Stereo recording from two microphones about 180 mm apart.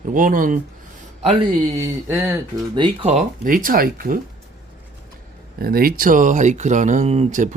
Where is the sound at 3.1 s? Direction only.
45° right (ahead or behind).